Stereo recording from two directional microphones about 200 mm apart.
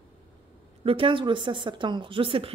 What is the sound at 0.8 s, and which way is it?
A woman's voice, 25° right (ahead or behind).